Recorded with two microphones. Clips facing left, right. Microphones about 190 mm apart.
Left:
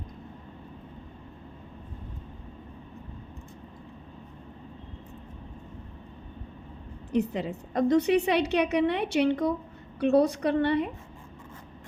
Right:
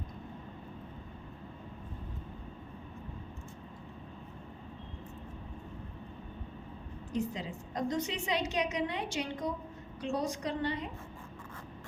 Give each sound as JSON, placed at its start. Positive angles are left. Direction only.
{"t": 7.1, "sound": "a woman's voice", "side_deg": 65}